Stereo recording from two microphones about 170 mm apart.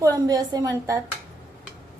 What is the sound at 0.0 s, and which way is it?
Speech, 20° right (ahead or behind).